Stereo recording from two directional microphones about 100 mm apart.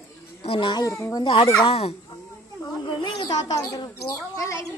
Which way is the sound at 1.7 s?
90° left.